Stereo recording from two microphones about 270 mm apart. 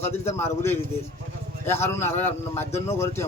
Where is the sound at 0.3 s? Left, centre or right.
Centre.